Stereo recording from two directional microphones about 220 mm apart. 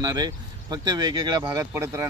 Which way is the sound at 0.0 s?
20° right (ahead or behind).